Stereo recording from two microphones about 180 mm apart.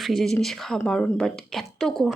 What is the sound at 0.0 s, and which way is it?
Speech, centre (ahead or behind).